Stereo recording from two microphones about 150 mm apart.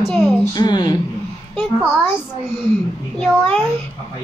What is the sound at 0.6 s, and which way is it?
Speech, 30° left (ahead or behind).